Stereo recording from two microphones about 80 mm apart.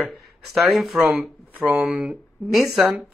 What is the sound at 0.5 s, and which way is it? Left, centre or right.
Speech, centre.